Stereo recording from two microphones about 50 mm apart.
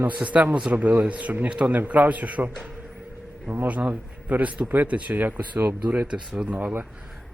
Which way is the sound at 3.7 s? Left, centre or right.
Right.